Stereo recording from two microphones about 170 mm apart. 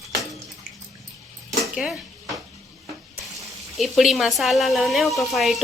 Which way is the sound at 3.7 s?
Centre (ahead or behind).